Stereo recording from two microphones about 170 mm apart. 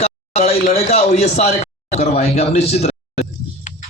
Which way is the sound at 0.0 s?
40° left (ahead or behind).